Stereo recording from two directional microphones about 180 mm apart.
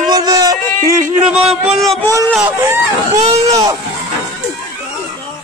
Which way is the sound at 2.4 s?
15° right (ahead or behind).